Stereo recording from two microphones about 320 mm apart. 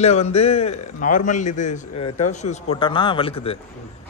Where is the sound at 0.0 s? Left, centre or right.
Centre.